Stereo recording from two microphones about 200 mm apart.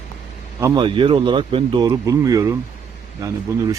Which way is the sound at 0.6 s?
20° right (ahead or behind).